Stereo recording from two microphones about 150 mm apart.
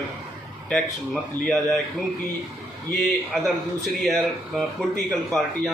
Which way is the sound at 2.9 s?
Centre (ahead or behind).